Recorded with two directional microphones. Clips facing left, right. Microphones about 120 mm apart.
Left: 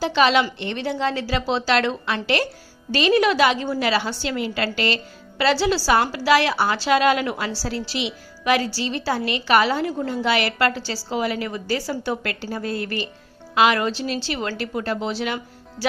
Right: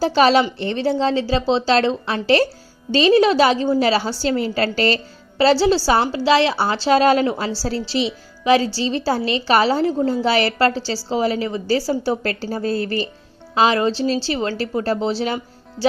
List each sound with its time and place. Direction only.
0.0 s a woman's voice: 35° right (ahead or behind)